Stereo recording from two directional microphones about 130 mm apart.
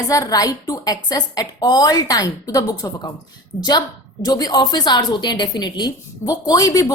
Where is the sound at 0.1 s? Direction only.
25° left (ahead or behind).